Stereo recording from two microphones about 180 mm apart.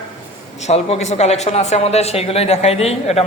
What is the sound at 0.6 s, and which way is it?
Speech, 35° left (ahead or behind).